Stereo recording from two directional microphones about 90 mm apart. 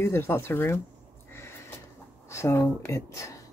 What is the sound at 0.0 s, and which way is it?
Speech, 30° left (ahead or behind).